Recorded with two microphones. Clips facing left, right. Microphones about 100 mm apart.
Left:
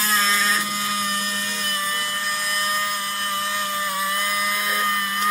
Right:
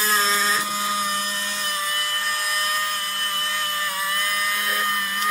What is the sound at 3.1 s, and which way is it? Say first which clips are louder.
Tools: left 2 dB; 15° left (ahead or behind).